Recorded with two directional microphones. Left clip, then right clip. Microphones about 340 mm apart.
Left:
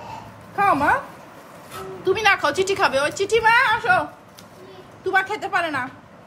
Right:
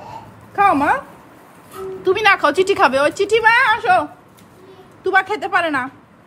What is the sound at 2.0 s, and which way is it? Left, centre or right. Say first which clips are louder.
A woman's voice: right 4 dB; right.